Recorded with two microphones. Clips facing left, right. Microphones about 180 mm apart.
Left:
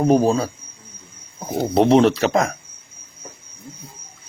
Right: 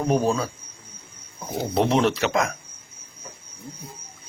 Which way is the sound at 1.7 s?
35° left (ahead or behind).